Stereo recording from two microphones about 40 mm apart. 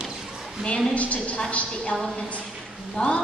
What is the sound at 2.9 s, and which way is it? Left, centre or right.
Speech, left.